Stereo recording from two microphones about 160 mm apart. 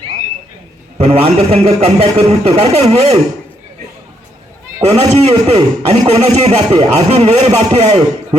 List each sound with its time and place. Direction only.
0.9 s a man's voice: 40° right (ahead or behind)
4.9 s a man's voice: 40° right (ahead or behind)